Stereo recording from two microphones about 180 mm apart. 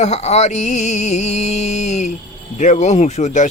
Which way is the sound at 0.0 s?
40° left (ahead or behind).